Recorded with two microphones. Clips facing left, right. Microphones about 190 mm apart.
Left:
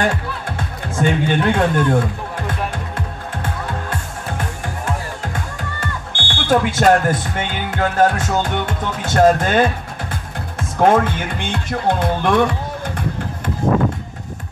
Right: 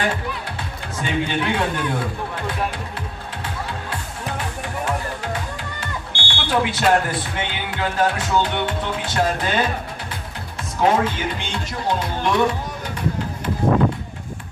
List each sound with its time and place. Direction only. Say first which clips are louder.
0.6 s speech: left 7 dB; 45° left (ahead or behind)
3.4 s music: left 3 dB; 45° left (ahead or behind)
5.2 s speech: left 1 dB; 50° left (ahead or behind)
10.8 s speech: left 4 dB; 50° left (ahead or behind)